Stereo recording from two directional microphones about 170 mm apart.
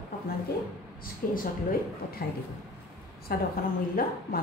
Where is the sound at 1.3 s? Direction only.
60° left (ahead or behind).